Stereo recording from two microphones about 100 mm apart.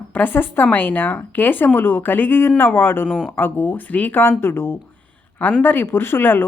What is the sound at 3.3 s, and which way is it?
A woman's voice, 20° left (ahead or behind).